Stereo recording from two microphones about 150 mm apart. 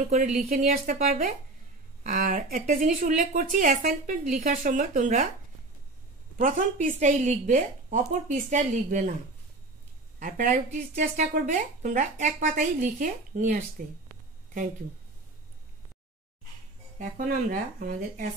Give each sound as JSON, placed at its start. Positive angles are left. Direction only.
{"t": 0.4, "sound": "speech", "side_deg": -70}
{"t": 6.4, "sound": "speech", "side_deg": -60}
{"t": 10.1, "sound": "speech", "side_deg": -60}
{"t": 13.8, "sound": "speech", "side_deg": -70}
{"t": 17.0, "sound": "speech", "side_deg": -65}